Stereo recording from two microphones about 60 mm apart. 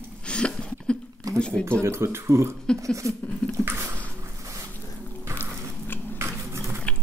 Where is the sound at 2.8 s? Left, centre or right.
Right.